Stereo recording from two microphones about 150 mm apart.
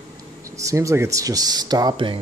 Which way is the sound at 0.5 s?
20° right (ahead or behind).